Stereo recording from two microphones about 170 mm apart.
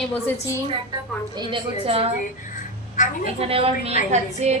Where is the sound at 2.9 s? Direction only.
50° left (ahead or behind).